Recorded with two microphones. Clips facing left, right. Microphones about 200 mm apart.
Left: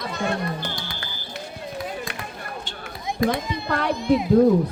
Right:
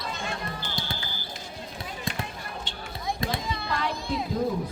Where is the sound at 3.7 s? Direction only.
60° left (ahead or behind).